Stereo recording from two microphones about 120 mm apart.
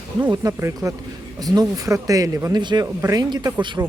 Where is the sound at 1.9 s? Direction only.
25° right (ahead or behind).